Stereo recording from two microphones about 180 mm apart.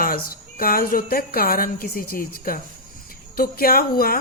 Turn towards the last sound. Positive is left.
turn(degrees=55)  # may be behind; listen again after turning